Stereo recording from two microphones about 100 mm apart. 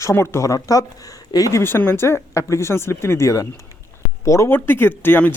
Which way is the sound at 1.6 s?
25° left (ahead or behind).